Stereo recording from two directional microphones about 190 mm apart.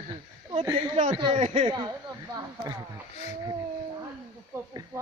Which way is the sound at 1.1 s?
30° right (ahead or behind).